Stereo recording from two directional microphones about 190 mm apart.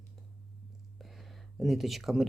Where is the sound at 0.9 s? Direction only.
Centre (ahead or behind).